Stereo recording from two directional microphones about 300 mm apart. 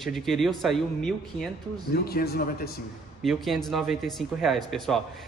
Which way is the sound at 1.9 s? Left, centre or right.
Left.